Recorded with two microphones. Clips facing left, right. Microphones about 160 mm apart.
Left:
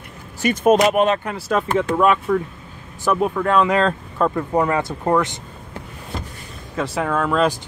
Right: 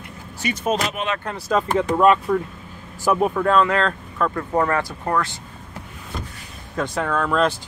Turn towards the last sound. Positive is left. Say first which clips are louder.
# left 1 dB
turn(degrees=5)  # may be behind; listen again after turning